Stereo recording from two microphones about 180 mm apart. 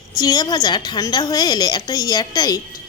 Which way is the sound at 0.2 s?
20° left (ahead or behind).